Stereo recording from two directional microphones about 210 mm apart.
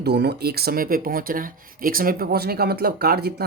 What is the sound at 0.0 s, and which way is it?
Speech, 50° right (ahead or behind).